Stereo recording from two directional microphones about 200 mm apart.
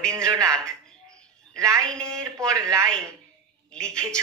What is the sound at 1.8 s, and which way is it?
A woman's voice, 5° left (ahead or behind).